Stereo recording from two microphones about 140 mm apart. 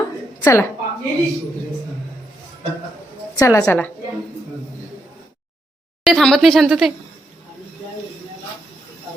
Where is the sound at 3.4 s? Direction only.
20° left (ahead or behind).